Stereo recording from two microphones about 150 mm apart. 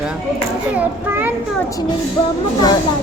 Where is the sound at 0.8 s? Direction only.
10° right (ahead or behind).